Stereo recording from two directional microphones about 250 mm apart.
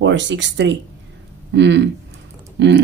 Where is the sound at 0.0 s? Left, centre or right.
Right.